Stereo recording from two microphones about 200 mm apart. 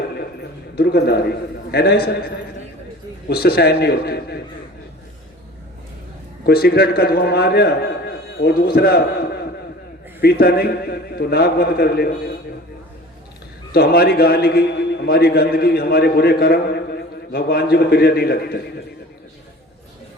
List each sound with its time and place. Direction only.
0.8 s a man's voice: 50° left (ahead or behind)
6.4 s a man's voice: 50° left (ahead or behind)
13.7 s a man's voice: 50° left (ahead or behind)